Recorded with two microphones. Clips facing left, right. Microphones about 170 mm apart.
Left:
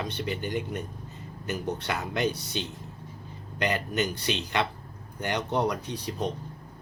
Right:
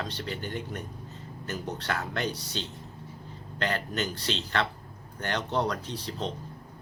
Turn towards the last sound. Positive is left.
turn(degrees=15)  # may be behind; listen again after turning